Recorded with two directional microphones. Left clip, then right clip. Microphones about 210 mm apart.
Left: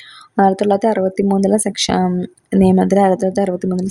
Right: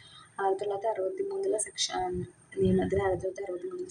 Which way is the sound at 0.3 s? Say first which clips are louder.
Left 16 dB; 50° left (ahead or behind).